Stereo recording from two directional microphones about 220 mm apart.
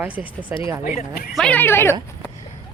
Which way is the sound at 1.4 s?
5° left (ahead or behind).